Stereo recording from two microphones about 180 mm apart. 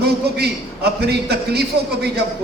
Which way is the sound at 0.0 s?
65° right (ahead or behind).